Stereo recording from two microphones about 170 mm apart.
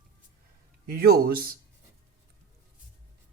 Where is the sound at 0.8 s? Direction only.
65° right (ahead or behind).